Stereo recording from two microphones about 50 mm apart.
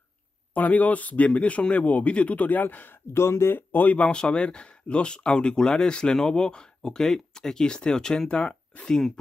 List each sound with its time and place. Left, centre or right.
0.6 s speech: left
3.1 s speech: left
3.7 s speech: left; by 9.2 s centre